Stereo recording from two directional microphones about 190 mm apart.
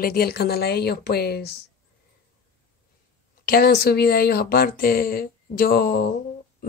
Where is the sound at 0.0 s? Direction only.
55° left (ahead or behind).